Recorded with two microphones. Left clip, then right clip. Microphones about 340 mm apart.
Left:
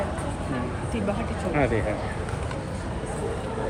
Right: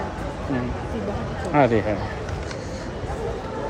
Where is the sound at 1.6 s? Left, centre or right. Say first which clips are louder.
Right 7 dB; right.